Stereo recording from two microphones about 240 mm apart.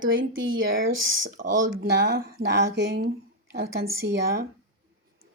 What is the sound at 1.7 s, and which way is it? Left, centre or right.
Speech, right.